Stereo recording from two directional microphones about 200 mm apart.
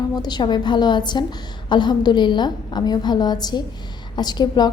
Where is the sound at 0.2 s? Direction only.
20° left (ahead or behind).